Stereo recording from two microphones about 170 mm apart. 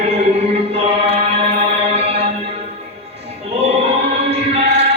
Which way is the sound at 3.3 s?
35° right (ahead or behind).